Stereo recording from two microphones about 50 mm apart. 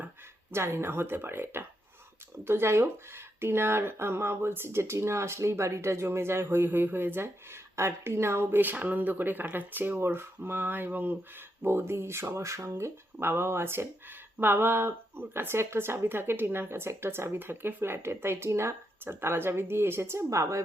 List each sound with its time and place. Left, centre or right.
0.5 s speech: right
8.6 s speech: right
10.0 s speech: right
11.6 s speech: right
12.3 s speech: right
13.1 s speech: right
14.3 s speech: right
19.0 s speech: right